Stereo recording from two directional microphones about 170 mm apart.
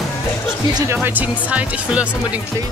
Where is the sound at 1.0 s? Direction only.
10° right (ahead or behind).